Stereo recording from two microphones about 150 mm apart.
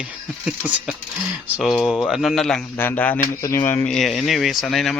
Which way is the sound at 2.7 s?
15° left (ahead or behind).